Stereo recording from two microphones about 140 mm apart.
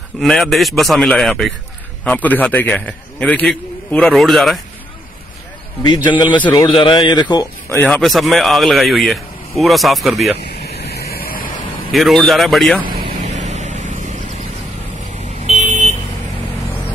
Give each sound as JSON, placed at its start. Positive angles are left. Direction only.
{"t": 0.2, "sound": "a man's voice", "side_deg": 0}
{"t": 5.8, "sound": "a man's voice", "side_deg": 30}
{"t": 7.7, "sound": "a man's voice", "side_deg": 15}
{"t": 8.0, "sound": "speech", "side_deg": 0}
{"t": 11.0, "sound": "vehicle", "side_deg": 90}
{"t": 11.9, "sound": "speech", "side_deg": 0}
{"t": 13.2, "sound": "vehicle", "side_deg": -60}
{"t": 15.4, "sound": "vehicle", "side_deg": -50}